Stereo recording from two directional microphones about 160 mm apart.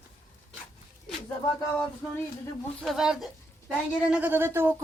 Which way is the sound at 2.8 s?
Centre (ahead or behind).